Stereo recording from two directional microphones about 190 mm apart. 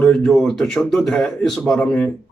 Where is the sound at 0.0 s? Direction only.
5° left (ahead or behind).